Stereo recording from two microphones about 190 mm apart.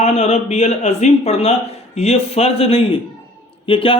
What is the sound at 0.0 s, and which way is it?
Speech, 35° left (ahead or behind).